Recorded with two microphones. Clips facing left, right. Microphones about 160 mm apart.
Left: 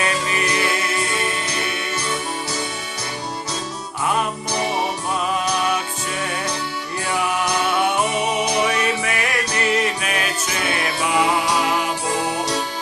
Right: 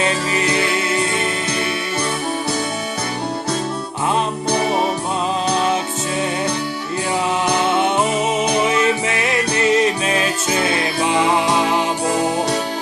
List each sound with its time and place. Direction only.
0.0 s music: 25° right (ahead or behind)
5.5 s music: 25° right (ahead or behind)
7.4 s music: 25° right (ahead or behind)